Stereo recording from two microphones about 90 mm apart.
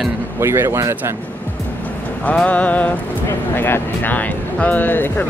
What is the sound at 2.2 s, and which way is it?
Music, 15° left (ahead or behind).